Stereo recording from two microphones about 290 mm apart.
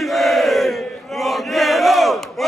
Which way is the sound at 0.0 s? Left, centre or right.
Centre.